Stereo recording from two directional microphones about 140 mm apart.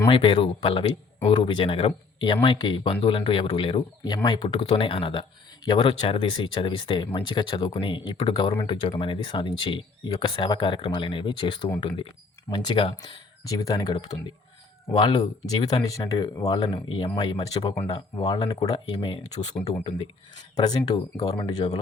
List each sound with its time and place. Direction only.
0.1 s speech: 40° left (ahead or behind)
16.6 s speech: 35° left (ahead or behind)
18.3 s speech: 30° left (ahead or behind)